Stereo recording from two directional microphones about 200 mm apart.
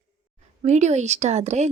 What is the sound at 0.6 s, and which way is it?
Speech, 35° right (ahead or behind).